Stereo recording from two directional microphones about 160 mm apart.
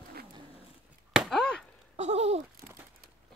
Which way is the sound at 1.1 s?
Centre (ahead or behind).